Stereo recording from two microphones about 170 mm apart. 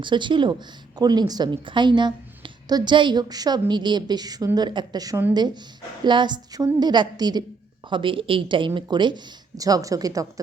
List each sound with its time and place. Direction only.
0.0 s a woman's voice: 30° right (ahead or behind)